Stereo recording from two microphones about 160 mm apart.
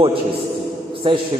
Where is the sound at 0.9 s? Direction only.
35° right (ahead or behind).